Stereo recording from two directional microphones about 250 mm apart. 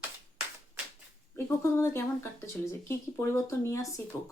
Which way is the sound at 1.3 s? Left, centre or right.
Centre.